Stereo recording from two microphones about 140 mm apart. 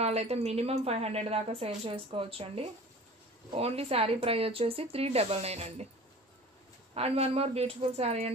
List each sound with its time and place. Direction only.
0.0 s a woman's voice: 50° right (ahead or behind)
6.9 s a woman's voice: 45° right (ahead or behind)